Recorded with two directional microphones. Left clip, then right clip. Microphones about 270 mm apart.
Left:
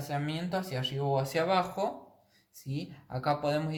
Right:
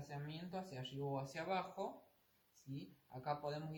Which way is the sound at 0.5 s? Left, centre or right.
Left.